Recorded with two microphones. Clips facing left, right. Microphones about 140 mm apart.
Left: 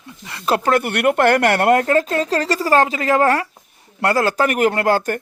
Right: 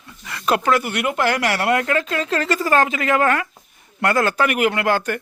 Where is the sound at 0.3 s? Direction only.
30° left (ahead or behind).